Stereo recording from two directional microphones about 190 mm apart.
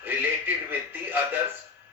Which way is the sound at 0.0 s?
10° right (ahead or behind).